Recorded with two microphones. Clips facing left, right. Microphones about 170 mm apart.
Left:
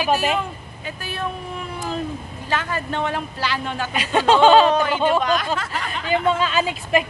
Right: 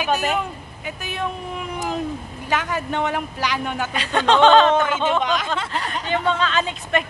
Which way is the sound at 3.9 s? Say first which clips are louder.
Left 2 dB; 10° left (ahead or behind).